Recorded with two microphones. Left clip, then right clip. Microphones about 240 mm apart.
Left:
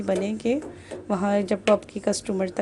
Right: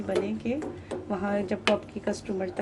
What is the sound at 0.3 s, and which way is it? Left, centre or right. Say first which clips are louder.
Speech: left 6 dB; left.